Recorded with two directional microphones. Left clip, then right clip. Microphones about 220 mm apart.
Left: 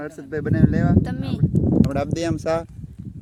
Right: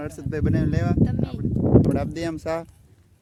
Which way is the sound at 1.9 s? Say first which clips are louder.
Left 2 dB; 15° left (ahead or behind).